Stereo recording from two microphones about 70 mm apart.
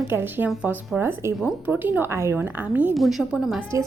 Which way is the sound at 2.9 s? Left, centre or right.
Centre.